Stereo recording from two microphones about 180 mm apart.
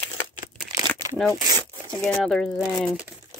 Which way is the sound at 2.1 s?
5° left (ahead or behind).